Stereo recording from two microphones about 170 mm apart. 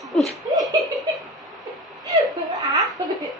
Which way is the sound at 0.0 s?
Centre (ahead or behind).